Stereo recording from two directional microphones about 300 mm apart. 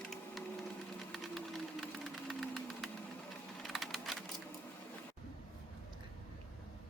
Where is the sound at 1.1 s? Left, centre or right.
Centre.